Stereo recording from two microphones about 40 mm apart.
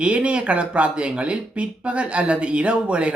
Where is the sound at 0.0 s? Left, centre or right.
Right.